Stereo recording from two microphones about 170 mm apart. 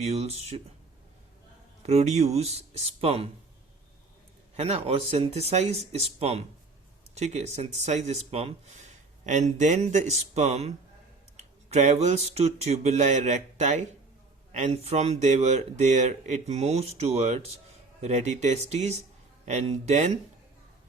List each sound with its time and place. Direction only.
0.0 s speech: 40° right (ahead or behind)
1.8 s speech: 40° right (ahead or behind)
4.5 s speech: 40° right (ahead or behind)